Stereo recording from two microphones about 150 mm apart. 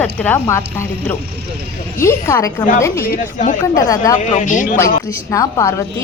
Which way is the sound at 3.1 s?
55° left (ahead or behind).